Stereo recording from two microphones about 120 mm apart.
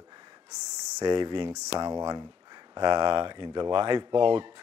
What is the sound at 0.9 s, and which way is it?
Speech, 30° right (ahead or behind).